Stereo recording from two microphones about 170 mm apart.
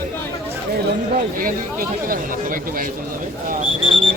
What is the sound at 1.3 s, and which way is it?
Speech, 55° right (ahead or behind).